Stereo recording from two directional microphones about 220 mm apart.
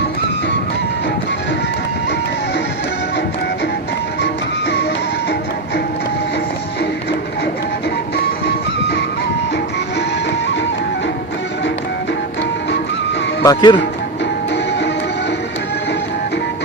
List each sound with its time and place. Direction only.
4.2 s music: 50° left (ahead or behind)
8.1 s music: 45° left (ahead or behind)
13.4 s speech: 20° left (ahead or behind)
14.5 s music: 50° left (ahead or behind)